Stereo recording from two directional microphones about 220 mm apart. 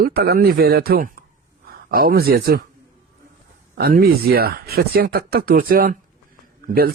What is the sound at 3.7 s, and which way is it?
Speech, 45° right (ahead or behind).